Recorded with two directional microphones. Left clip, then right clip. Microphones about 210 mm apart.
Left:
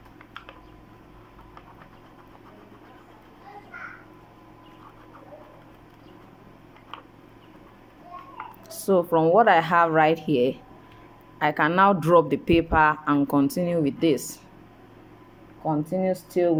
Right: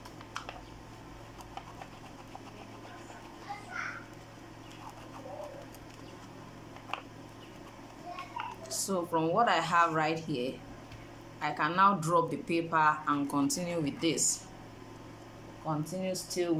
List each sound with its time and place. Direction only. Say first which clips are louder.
6.9 s a sound: right 2 dB; 10° right (ahead or behind)
8.7 s speech: left 11 dB; 35° left (ahead or behind)
15.8 s speech: left 10 dB; 30° left (ahead or behind)